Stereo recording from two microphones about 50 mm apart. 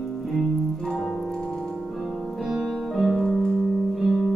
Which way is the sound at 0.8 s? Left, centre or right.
Centre.